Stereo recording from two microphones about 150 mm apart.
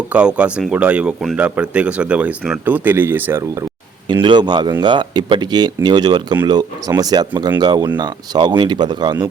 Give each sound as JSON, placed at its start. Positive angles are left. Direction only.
{"t": 0.1, "sound": "speech", "side_deg": -5}
{"t": 4.1, "sound": "speech", "side_deg": -30}